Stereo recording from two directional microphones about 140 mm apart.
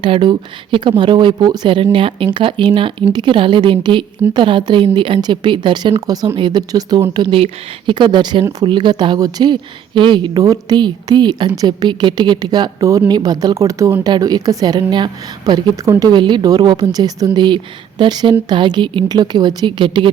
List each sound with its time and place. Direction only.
0.0 s a woman's voice: 35° right (ahead or behind)